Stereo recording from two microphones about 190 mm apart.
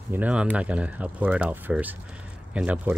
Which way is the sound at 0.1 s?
5° right (ahead or behind).